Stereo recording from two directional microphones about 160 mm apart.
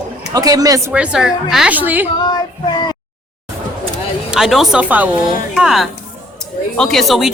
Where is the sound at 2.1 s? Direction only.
25° left (ahead or behind).